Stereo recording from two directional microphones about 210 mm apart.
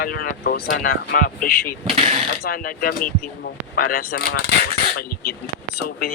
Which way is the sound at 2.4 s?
45° left (ahead or behind).